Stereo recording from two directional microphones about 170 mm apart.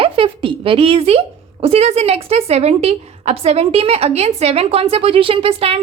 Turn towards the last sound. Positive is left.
turn(degrees=-35)  # may be behind; listen again after turning